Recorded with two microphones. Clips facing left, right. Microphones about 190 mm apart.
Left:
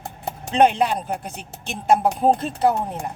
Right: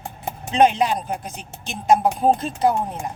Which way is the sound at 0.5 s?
55° left (ahead or behind).